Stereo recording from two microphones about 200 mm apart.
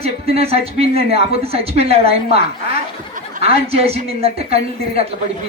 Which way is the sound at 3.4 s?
30° right (ahead or behind).